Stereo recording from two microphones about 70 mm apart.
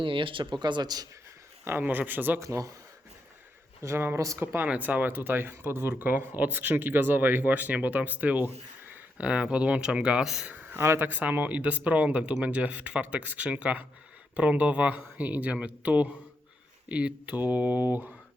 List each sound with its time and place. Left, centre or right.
0.5 s speech: right
1.6 s speech: right
2.4 s speech: right
3.8 s speech: right; by 10.5 s centre
10.5 s a sound: right
10.8 s speech: right